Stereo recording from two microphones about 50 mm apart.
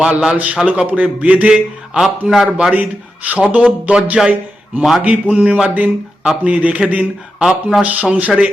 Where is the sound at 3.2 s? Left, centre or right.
Right.